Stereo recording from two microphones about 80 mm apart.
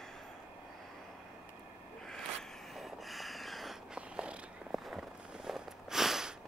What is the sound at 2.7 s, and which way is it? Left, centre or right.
Snort, centre.